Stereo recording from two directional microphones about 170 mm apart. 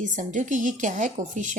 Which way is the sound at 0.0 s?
50° right (ahead or behind).